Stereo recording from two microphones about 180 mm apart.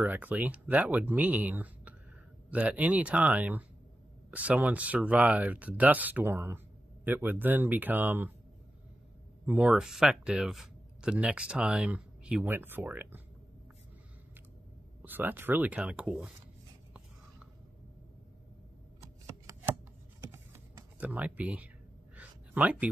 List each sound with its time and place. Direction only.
0.0 s speech: 10° right (ahead or behind)
9.5 s speech: 5° right (ahead or behind)
15.0 s speech: 10° right (ahead or behind)
19.2 s shuffling cards: 15° right (ahead or behind)
20.2 s typing: 10° right (ahead or behind)
22.1 s a sound: 10° right (ahead or behind)